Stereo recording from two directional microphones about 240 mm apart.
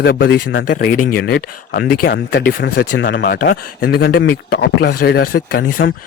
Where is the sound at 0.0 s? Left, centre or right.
Left.